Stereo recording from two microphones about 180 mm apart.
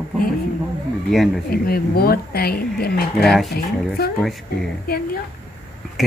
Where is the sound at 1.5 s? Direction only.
55° left (ahead or behind).